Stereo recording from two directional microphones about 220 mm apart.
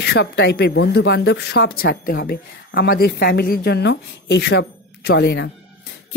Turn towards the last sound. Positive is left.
turn(degrees=50)  # may be behind; listen again after turning